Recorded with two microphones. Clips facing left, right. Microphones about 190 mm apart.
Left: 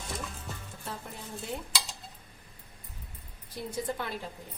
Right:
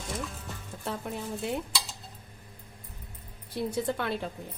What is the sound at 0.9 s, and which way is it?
Speech, 65° right (ahead or behind).